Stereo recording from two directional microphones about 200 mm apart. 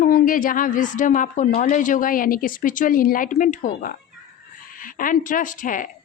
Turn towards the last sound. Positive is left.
turn(degrees=40)  # may be behind; listen again after turning